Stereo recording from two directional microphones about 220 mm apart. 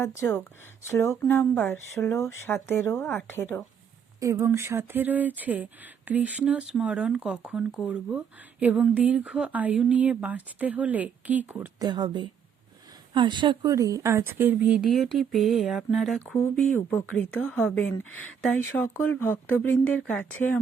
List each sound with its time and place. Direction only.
0.2 s speech: 10° left (ahead or behind)
4.2 s speech: 10° right (ahead or behind)
11.9 s speech: 20° right (ahead or behind); by 20.6 s 5° left (ahead or behind)